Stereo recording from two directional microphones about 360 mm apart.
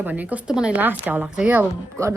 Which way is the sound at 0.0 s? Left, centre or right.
Centre.